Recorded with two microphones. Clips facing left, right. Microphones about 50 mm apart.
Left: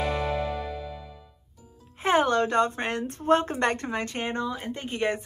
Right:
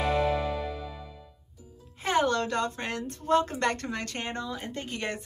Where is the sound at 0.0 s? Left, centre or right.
Centre.